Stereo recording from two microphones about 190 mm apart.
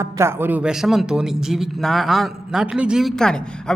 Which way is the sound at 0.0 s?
15° right (ahead or behind).